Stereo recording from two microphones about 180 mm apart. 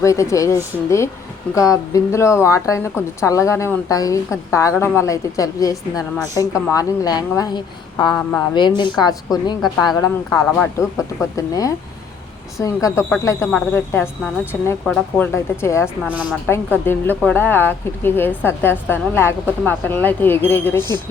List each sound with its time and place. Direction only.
0.0 s a woman's voice: 15° left (ahead or behind)
16.0 s a woman's voice: 5° right (ahead or behind)
16.7 s a woman's voice: 10° left (ahead or behind)